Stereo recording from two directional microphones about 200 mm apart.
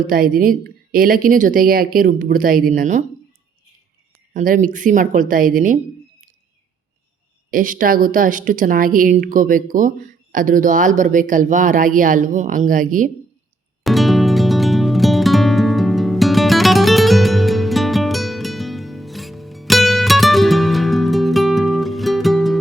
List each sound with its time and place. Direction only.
0.1 s a woman's voice: 45° right (ahead or behind)
4.4 s speech: 40° right (ahead or behind)
7.5 s a woman's voice: 45° right (ahead or behind)
13.8 s music: centre (ahead or behind)